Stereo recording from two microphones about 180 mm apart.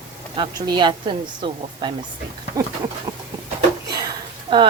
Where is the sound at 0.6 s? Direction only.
25° right (ahead or behind).